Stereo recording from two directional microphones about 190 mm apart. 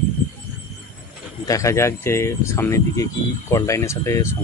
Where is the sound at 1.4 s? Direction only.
15° left (ahead or behind).